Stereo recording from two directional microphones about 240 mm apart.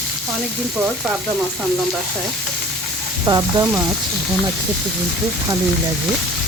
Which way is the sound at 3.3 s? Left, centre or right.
Centre.